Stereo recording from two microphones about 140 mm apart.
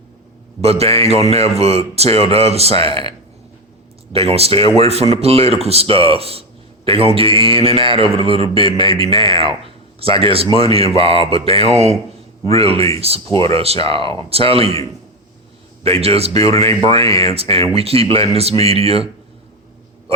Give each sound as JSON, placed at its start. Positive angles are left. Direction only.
{"t": 0.6, "sound": "a man's voice", "side_deg": -45}
{"t": 15.8, "sound": "speech", "side_deg": -45}